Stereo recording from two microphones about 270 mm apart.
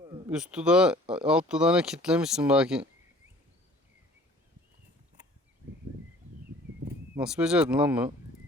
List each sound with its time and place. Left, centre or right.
0.0 s a sound: centre
0.3 s speech: centre
7.2 s speech: centre